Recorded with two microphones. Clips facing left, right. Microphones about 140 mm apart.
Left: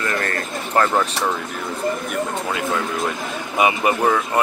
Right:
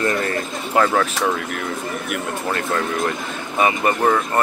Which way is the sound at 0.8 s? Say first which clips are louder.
Right 1 dB; 5° left (ahead or behind).